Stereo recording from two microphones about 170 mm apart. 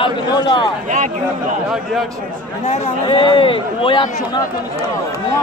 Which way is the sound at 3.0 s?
30° left (ahead or behind).